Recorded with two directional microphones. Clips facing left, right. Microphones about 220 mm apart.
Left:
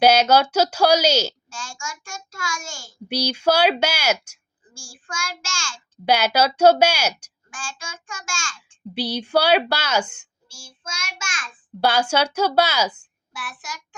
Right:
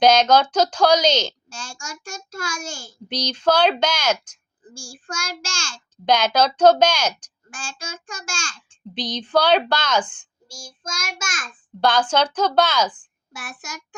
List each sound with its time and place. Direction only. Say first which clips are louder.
0.0 s a woman's voice: even; 10° left (ahead or behind)
1.5 s a child's voice: left 1 dB; 40° right (ahead or behind)
3.1 s a woman's voice: even; 10° left (ahead or behind)
4.6 s a child's voice: right 6 dB; 40° right (ahead or behind)
6.1 s a woman's voice: right 1 dB; 10° left (ahead or behind)
7.5 s a child's voice: right 2 dB; 40° right (ahead or behind)
9.0 s a woman's voice: even; 10° left (ahead or behind)
10.5 s child singing: right 4 dB; 40° right (ahead or behind)
11.8 s a woman's voice: right 1 dB; 10° left (ahead or behind)
13.3 s child singing: even; 45° right (ahead or behind)